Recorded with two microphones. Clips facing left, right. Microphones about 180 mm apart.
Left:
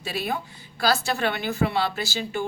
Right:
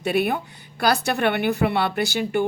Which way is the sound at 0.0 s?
60° right (ahead or behind).